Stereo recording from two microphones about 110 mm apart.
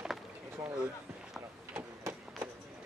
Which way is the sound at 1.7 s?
20° right (ahead or behind).